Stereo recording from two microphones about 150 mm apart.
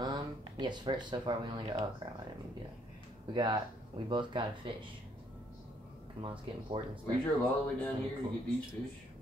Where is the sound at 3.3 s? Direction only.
30° right (ahead or behind).